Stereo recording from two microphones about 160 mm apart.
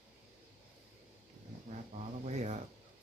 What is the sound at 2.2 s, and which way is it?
Speech, 45° right (ahead or behind).